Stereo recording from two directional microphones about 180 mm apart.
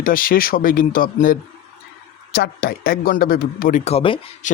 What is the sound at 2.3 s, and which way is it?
Speech, 60° left (ahead or behind).